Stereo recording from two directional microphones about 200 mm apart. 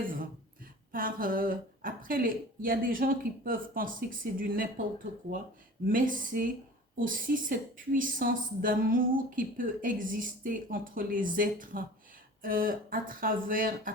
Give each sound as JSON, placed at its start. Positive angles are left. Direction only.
{"t": 0.9, "sound": "a woman's voice", "side_deg": -45}
{"t": 5.9, "sound": "a woman's voice", "side_deg": -45}